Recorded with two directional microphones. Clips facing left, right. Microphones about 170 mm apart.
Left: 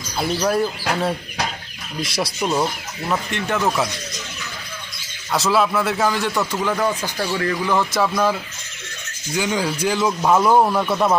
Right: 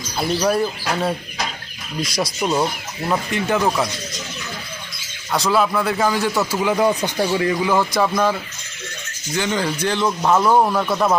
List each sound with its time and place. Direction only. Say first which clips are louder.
0.3 s speech: right 1 dB; 5° right (ahead or behind)
2.4 s speech: right 1 dB; 10° right (ahead or behind)
5.3 s speech: even; centre (ahead or behind); by 7.9 s 15° right (ahead or behind)
7.9 s speech: right 1 dB; centre (ahead or behind)